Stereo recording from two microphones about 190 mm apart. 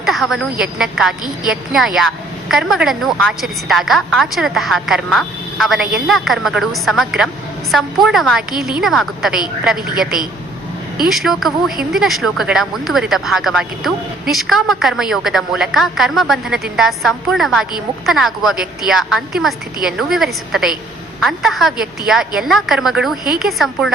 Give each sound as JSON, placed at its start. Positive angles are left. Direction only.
{"t": 0.0, "sound": "a woman's voice", "side_deg": 0}
{"t": 9.7, "sound": "a woman's voice", "side_deg": -50}
{"t": 11.1, "sound": "a woman's voice", "side_deg": 0}